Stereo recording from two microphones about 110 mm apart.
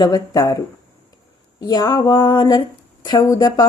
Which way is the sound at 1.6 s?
35° left (ahead or behind).